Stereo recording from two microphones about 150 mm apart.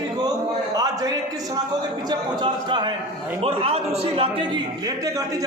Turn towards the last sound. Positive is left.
turn(degrees=-40)  # may be behind; listen again after turning